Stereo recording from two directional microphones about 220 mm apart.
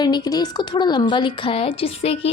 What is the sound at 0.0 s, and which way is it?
A woman's voice, 20° left (ahead or behind).